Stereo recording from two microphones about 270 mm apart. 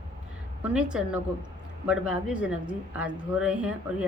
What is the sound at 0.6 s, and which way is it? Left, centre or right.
A woman's voice, centre.